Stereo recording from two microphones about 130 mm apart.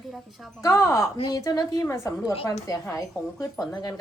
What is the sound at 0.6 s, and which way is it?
A woman's voice, 25° left (ahead or behind).